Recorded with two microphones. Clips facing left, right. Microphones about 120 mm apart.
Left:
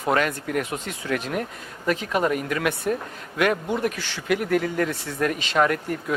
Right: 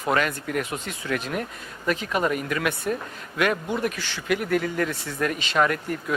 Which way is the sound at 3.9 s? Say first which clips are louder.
Left 1 dB; 40° left (ahead or behind).